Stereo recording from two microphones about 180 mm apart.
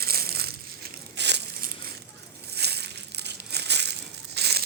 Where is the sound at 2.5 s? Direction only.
65° right (ahead or behind).